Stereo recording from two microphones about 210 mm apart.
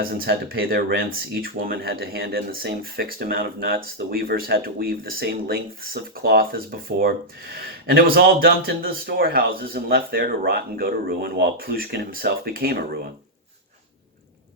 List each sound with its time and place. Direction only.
0.0 s speech: 45° right (ahead or behind)